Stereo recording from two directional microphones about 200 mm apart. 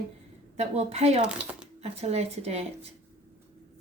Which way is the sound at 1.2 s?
5° right (ahead or behind).